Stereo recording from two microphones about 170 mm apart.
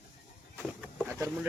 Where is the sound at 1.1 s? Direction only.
15° right (ahead or behind).